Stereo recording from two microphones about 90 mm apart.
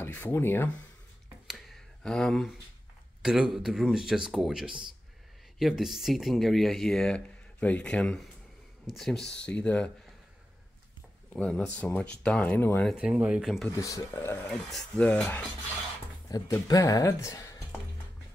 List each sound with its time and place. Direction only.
0.0 s speech: 25° left (ahead or behind)
1.5 s a sound: 5° left (ahead or behind)
3.2 s speech: 5° right (ahead or behind); by 9.8 s 15° left (ahead or behind)
11.3 s speech: 15° left (ahead or behind)
12.9 s speech: 10° right (ahead or behind)
13.7 s speech: 35° left (ahead or behind)
14.5 s speech: 5° left (ahead or behind)
15.0 s speech: 15° left (ahead or behind)
16.3 s speech: 40° left (ahead or behind)